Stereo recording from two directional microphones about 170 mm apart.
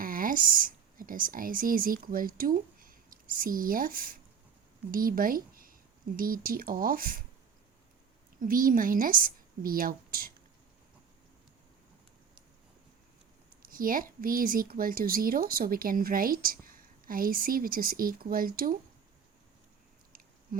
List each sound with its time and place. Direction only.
0.0 s a woman's voice: 55° right (ahead or behind)
8.4 s a woman's voice: 55° right (ahead or behind)
13.6 s a woman's voice: 55° right (ahead or behind)
20.5 s a sound: 55° right (ahead or behind)